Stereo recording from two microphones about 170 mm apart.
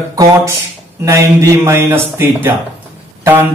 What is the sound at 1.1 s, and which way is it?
Speech, 15° right (ahead or behind).